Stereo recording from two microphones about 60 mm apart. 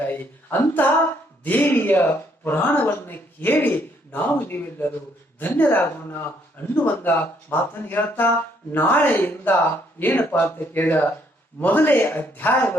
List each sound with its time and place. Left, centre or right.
0.0 s speech: left